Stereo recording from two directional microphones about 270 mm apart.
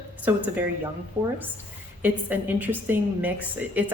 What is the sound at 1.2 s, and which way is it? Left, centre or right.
Speech, right.